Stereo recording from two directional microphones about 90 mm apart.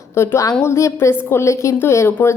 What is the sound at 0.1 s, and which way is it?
A woman's voice, 30° left (ahead or behind).